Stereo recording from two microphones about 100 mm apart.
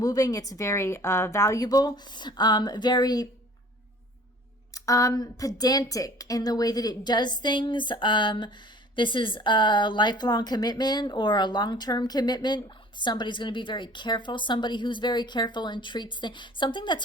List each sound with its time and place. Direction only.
0.0 s a woman's voice: 35° left (ahead or behind)
4.7 s speech: 35° left (ahead or behind); by 17.0 s 50° left (ahead or behind)